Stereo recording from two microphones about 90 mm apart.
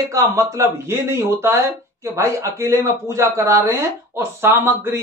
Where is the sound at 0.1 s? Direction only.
40° right (ahead or behind).